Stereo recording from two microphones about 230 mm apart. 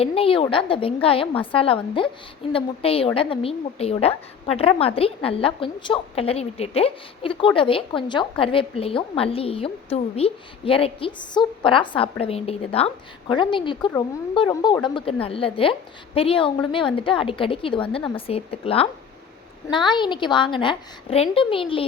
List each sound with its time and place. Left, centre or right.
0.0 s a woman's voice: left